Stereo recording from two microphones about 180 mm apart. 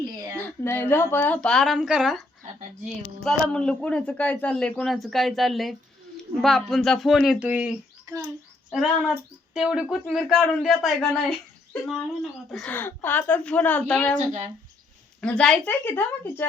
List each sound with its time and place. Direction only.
0.0 s a sound: 20° right (ahead or behind)
0.3 s speech: 10° left (ahead or behind); by 7.7 s 5° right (ahead or behind)
8.7 s speech: centre (ahead or behind)
15.2 s speech: 5° left (ahead or behind)